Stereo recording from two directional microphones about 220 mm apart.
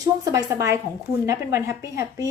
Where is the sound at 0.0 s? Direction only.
15° right (ahead or behind).